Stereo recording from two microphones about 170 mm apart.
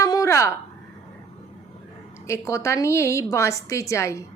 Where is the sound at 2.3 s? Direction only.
15° left (ahead or behind).